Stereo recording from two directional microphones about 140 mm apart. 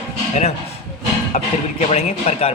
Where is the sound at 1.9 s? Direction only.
50° left (ahead or behind).